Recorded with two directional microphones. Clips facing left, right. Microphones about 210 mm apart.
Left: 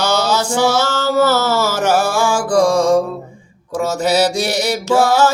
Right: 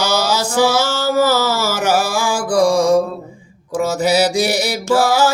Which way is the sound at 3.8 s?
10° right (ahead or behind).